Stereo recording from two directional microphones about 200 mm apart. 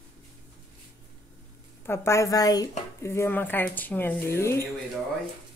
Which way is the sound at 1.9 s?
15° left (ahead or behind).